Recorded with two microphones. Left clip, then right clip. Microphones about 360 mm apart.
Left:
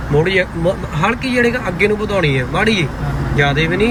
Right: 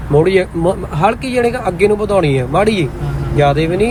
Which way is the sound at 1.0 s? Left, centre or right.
Centre.